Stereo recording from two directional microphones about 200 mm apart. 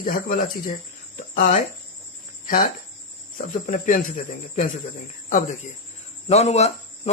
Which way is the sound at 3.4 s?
40° left (ahead or behind).